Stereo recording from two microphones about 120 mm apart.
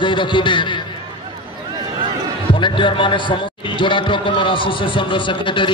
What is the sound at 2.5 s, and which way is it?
A man's voice, 45° left (ahead or behind).